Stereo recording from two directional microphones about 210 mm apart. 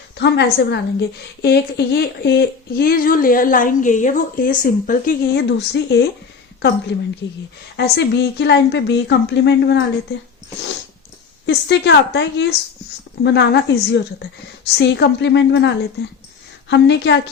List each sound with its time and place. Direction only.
0.2 s a woman's voice: 55° left (ahead or behind)
11.4 s a woman's voice: 55° left (ahead or behind)